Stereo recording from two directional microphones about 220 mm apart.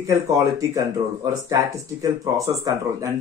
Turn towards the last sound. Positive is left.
turn(degrees=-15)  # may be behind; listen again after turning